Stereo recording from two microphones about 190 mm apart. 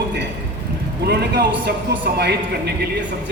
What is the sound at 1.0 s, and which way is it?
A man's voice, 60° right (ahead or behind).